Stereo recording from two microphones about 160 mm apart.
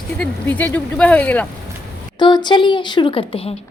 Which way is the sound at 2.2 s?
30° left (ahead or behind).